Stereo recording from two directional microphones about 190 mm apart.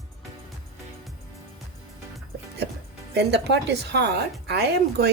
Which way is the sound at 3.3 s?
60° right (ahead or behind).